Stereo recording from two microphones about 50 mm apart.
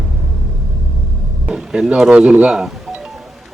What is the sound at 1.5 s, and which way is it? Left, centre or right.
Speech, centre.